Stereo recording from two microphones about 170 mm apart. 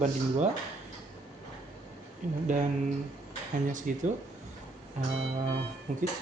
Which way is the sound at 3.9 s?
55° right (ahead or behind).